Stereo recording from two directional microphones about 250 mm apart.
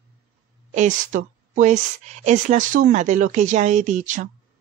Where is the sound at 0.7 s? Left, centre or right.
Right.